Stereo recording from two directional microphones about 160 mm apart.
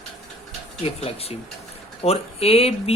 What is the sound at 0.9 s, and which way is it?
Speech, 40° left (ahead or behind).